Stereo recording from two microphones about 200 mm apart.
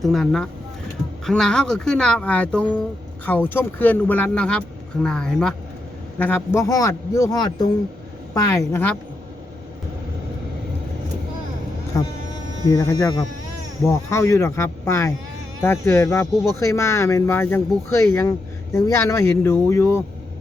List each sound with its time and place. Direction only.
0.0 s speech: centre (ahead or behind)
12.7 s speech: 15° left (ahead or behind)